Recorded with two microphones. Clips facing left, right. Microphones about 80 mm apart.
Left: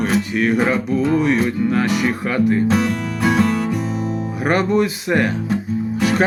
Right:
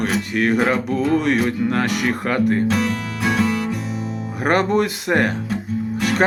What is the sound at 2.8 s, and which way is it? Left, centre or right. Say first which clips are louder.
Music: left 3 dB; centre.